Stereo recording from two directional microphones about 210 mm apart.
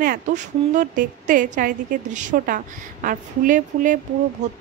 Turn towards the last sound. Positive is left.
turn(degrees=-35)  # may be behind; listen again after turning